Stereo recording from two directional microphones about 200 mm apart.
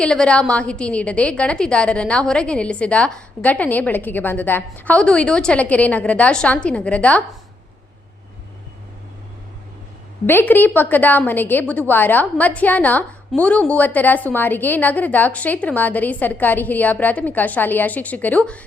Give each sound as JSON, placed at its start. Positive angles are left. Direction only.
{"t": 0.0, "sound": "a woman's voice", "side_deg": 5}
{"t": 10.2, "sound": "a woman's voice", "side_deg": 10}